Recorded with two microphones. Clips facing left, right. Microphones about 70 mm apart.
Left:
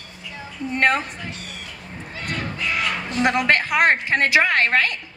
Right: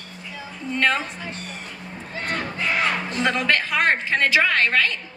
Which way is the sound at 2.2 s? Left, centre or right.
Right.